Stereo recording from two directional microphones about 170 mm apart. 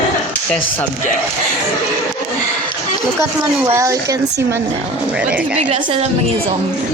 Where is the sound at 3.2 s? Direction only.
15° right (ahead or behind).